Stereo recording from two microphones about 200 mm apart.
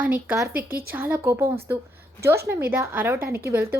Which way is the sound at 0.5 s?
45° right (ahead or behind).